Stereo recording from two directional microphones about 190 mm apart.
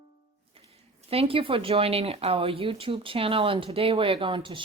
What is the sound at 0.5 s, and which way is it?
Speech, 30° right (ahead or behind).